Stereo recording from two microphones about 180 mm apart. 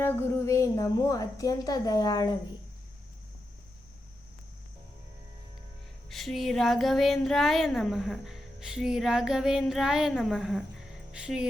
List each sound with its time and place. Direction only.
0.0 s a woman's voice: 15° left (ahead or behind)
6.1 s speech: centre (ahead or behind)